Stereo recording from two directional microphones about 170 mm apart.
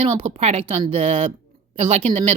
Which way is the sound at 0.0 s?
30° right (ahead or behind).